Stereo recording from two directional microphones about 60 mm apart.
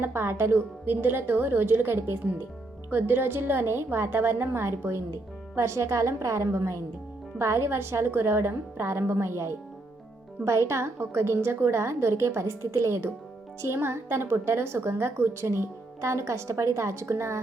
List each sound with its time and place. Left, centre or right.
0.0 s a woman's voice: right